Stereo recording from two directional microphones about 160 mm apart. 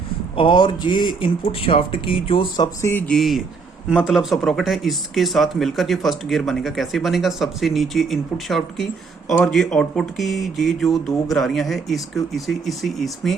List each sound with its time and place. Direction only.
0.3 s speech: 30° left (ahead or behind)
3.1 s speech: centre (ahead or behind)